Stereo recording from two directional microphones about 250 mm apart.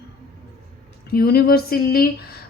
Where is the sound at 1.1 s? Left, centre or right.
Left.